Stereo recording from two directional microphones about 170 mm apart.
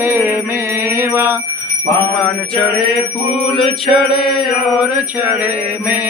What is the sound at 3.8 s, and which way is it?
Mantra, centre (ahead or behind).